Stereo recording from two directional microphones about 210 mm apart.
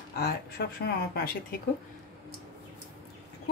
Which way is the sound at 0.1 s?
50° left (ahead or behind).